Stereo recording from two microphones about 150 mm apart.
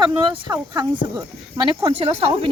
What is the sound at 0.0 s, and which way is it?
Speech, 30° right (ahead or behind).